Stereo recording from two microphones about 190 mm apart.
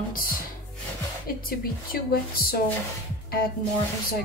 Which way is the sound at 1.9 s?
55° left (ahead or behind).